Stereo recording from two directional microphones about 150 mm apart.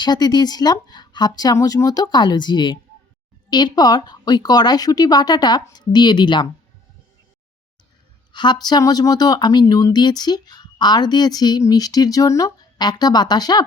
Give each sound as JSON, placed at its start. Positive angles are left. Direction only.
{"t": 0.0, "sound": "speech", "side_deg": 25}
{"t": 8.3, "sound": "speech", "side_deg": 30}